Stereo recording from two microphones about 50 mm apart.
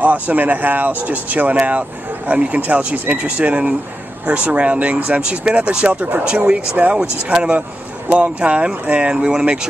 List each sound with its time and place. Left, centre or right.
0.0 s speech: right